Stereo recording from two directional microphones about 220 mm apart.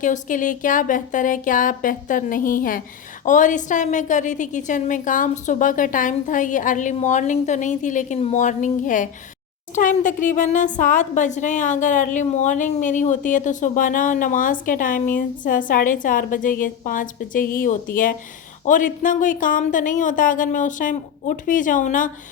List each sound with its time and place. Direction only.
0.0 s a woman's voice: 35° left (ahead or behind)